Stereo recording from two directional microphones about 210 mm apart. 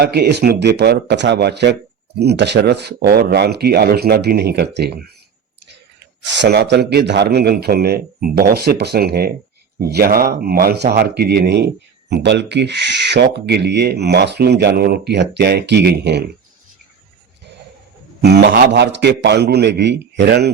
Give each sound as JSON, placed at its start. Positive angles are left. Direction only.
{"t": 0.0, "sound": "a man's voice", "side_deg": -50}
{"t": 6.2, "sound": "a man's voice", "side_deg": -55}
{"t": 18.2, "sound": "a man's voice", "side_deg": -50}